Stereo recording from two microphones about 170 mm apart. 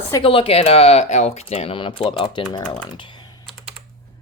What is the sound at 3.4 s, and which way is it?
Typing, centre (ahead or behind).